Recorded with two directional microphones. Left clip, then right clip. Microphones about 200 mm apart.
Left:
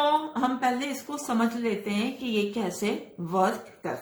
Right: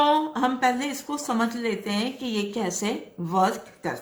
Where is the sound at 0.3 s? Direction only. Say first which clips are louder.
Right 3 dB; 20° right (ahead or behind).